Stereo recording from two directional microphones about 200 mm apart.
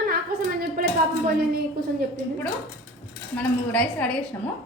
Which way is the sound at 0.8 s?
45° right (ahead or behind).